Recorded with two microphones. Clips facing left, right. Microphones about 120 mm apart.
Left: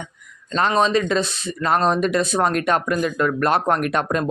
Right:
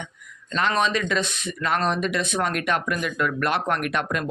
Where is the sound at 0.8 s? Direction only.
35° left (ahead or behind).